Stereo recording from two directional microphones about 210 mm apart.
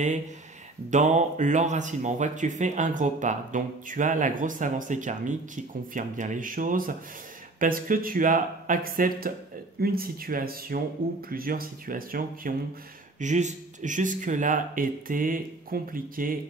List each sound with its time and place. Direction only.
0.8 s speech: 35° right (ahead or behind)